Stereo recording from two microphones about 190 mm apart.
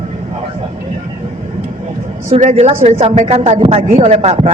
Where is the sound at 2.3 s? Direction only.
40° right (ahead or behind).